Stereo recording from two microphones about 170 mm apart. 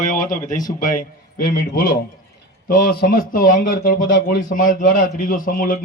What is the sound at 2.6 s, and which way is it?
Speech, 65° left (ahead or behind).